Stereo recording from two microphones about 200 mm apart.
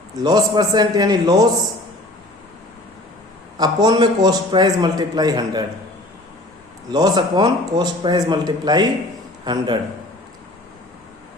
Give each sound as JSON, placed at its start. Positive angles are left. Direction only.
{"t": 0.2, "sound": "a man's voice", "side_deg": -20}
{"t": 3.6, "sound": "a man's voice", "side_deg": -20}
{"t": 6.9, "sound": "a man's voice", "side_deg": -20}